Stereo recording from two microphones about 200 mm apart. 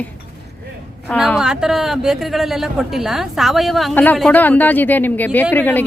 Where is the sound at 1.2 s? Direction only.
Centre (ahead or behind).